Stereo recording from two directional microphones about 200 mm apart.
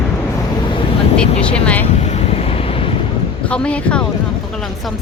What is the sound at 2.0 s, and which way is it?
Vehicle, 30° left (ahead or behind).